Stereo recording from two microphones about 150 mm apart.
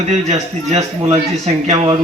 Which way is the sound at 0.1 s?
45° right (ahead or behind).